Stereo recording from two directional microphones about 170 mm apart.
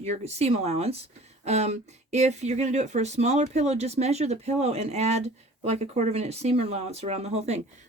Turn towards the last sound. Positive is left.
turn(degrees=-40)  # may be behind; listen again after turning